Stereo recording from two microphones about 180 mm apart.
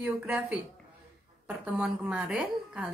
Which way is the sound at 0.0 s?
5° right (ahead or behind).